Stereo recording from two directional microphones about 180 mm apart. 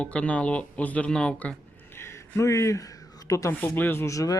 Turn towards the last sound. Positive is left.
turn(degrees=15)  # may be behind; listen again after turning